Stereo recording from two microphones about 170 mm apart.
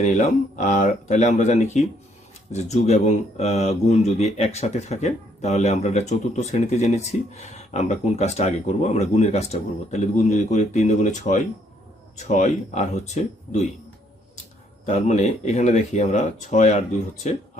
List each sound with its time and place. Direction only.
0.0 s speech: 45° left (ahead or behind)
14.8 s speech: 40° left (ahead or behind)